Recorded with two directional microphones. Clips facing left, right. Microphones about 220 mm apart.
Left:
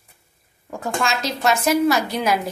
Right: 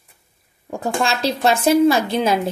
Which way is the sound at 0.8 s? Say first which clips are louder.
Right 3 dB; 35° right (ahead or behind).